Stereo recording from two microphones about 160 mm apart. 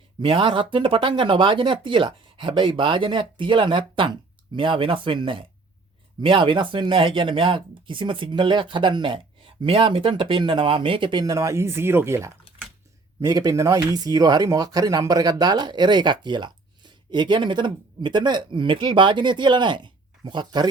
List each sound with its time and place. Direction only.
0.2 s speech: 35° right (ahead or behind)